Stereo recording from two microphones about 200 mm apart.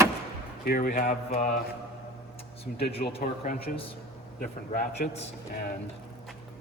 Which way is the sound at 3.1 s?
30° left (ahead or behind).